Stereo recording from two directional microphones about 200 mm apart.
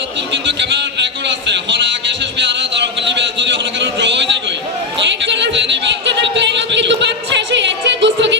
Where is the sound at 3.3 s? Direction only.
65° right (ahead or behind).